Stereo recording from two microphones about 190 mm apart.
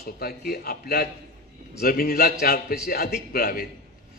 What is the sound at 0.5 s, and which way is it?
A man's voice, 55° left (ahead or behind).